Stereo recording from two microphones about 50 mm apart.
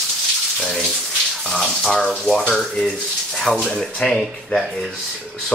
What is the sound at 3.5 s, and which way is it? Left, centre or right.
Speech, centre.